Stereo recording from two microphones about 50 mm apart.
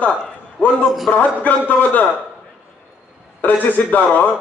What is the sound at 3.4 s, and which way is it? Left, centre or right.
Speech, left.